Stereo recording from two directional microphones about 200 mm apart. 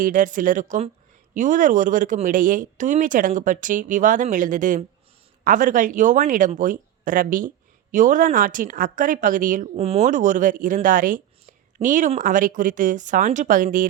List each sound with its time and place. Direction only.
0.0 s speech: 40° right (ahead or behind)